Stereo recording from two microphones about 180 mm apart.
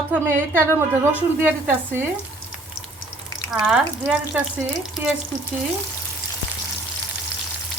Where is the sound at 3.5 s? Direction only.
5° right (ahead or behind).